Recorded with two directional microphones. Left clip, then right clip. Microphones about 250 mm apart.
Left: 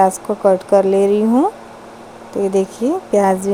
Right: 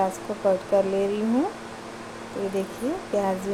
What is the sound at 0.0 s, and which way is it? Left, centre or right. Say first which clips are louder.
A woman's voice: left 11 dB; left.